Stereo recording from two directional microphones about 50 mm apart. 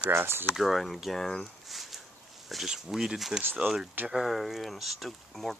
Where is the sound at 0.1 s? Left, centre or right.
Right.